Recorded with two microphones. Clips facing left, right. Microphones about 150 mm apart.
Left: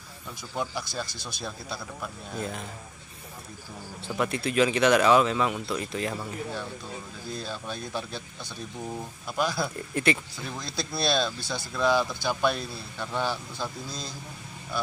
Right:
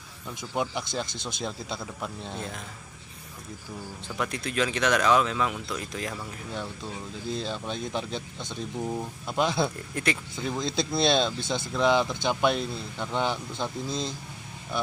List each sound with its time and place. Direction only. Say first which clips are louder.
0.4 s speech: right 3 dB; 20° right (ahead or behind)
2.3 s speech: left 3 dB; 5° left (ahead or behind)
4.2 s speech: left 4 dB; 5° left (ahead or behind)
7.3 s speech: right 2 dB; 20° right (ahead or behind)
9.9 s speech: left 4 dB; 5° left (ahead or behind)
10.3 s speech: right 6 dB; 20° right (ahead or behind)